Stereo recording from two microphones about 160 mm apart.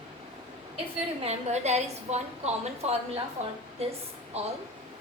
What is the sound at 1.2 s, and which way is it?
A woman's voice, 45° right (ahead or behind).